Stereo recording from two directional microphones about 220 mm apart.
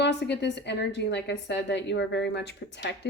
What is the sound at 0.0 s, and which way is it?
Speech, 50° left (ahead or behind).